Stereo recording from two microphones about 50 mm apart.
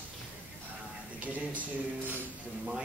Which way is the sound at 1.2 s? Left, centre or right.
Right.